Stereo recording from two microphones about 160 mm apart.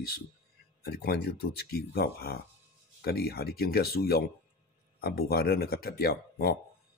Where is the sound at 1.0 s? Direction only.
85° left.